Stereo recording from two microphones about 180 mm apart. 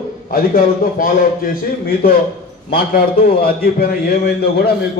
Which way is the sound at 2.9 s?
60° left (ahead or behind).